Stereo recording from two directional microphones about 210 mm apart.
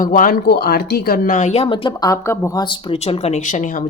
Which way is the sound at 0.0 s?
40° left (ahead or behind).